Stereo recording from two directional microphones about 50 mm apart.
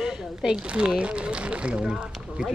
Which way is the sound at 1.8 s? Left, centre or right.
Centre.